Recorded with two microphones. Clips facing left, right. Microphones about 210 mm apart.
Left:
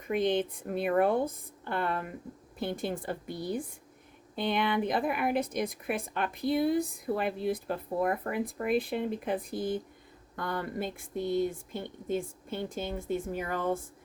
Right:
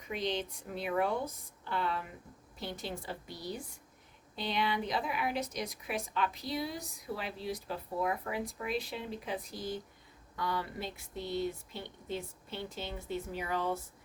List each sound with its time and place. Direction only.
0.0 s a woman's voice: 55° left (ahead or behind)